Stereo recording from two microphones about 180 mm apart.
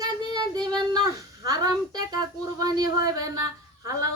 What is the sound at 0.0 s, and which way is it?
Child singing, 20° right (ahead or behind).